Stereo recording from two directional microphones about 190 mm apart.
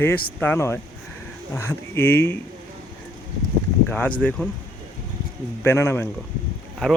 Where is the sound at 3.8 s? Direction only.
10° left (ahead or behind).